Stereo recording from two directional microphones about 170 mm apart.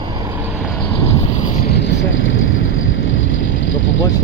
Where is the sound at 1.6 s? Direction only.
80° left.